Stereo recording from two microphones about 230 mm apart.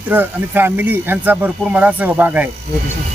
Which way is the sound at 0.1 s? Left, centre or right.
Centre.